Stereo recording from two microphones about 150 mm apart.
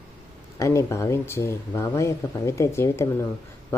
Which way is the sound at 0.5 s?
20° left (ahead or behind).